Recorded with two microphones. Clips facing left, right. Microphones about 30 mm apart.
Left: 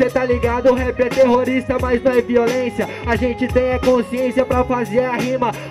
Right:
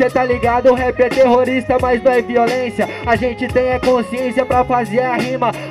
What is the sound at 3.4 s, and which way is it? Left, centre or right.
Music, right.